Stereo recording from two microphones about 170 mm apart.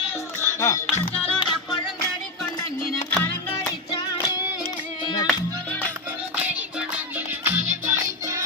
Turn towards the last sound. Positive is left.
turn(degrees=-15)  # may be behind; listen again after turning